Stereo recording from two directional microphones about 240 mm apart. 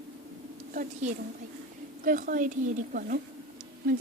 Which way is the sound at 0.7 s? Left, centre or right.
Right.